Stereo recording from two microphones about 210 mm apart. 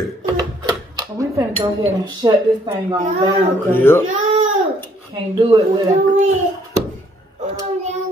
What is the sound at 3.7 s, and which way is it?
Speech, 10° left (ahead or behind).